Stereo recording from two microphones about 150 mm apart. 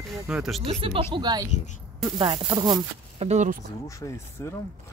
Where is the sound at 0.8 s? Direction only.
35° right (ahead or behind).